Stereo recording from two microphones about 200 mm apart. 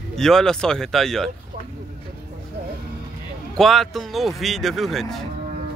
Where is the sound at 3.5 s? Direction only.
Centre (ahead or behind).